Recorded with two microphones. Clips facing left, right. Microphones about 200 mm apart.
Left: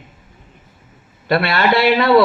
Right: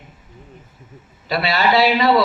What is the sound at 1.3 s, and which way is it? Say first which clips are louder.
Speech: left 2 dB; 55° left (ahead or behind).